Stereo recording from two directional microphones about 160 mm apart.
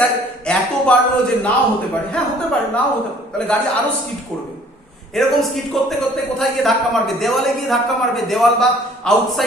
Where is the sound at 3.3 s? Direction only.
5° left (ahead or behind).